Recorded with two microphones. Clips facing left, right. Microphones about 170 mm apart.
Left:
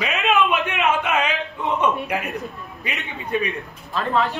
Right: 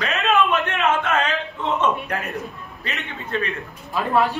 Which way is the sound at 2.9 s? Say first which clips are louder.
Left 2 dB; 10° left (ahead or behind).